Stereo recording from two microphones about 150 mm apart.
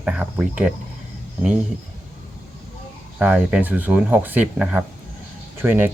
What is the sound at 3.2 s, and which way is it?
Speech, 10° right (ahead or behind).